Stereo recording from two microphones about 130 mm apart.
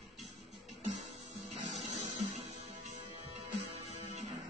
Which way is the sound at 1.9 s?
60° right (ahead or behind).